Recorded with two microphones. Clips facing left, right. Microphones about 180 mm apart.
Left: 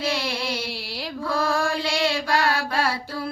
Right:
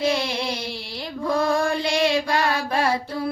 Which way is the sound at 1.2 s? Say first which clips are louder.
Right 3 dB; 20° right (ahead or behind).